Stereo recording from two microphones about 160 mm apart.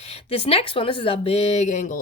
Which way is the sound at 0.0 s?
40° left (ahead or behind).